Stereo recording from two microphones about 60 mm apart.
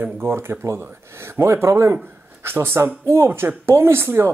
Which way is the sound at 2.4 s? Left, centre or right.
Right.